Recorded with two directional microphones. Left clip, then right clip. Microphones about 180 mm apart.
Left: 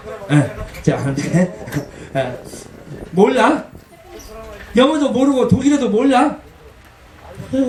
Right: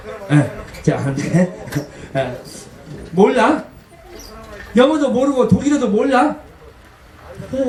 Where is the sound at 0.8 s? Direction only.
30° left (ahead or behind).